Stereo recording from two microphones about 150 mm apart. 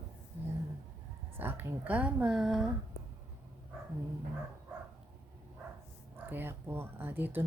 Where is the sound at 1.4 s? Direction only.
15° right (ahead or behind).